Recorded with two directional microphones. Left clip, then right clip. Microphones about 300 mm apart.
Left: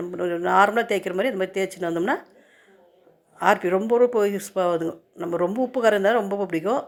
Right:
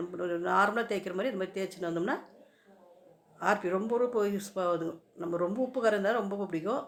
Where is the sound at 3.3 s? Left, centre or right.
Left.